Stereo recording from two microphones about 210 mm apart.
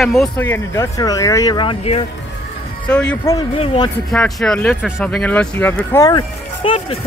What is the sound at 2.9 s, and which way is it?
Speech, 5° left (ahead or behind).